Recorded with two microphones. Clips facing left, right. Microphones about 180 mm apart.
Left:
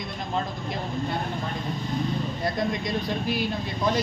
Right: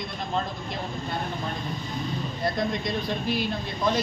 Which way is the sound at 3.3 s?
10° left (ahead or behind).